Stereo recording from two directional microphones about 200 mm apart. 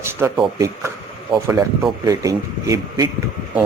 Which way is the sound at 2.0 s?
15° right (ahead or behind).